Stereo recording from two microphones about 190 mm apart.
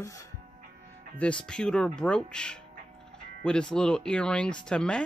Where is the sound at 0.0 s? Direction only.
15° left (ahead or behind).